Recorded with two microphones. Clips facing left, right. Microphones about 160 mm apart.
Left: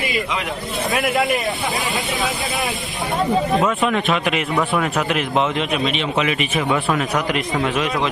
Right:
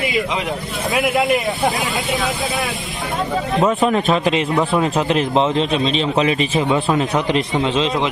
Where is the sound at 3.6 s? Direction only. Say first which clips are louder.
Right 3 dB; 35° right (ahead or behind).